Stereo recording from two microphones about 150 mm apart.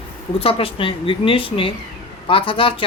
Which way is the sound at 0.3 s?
40° left (ahead or behind).